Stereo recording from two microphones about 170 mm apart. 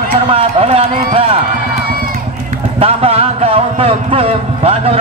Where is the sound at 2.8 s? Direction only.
35° right (ahead or behind).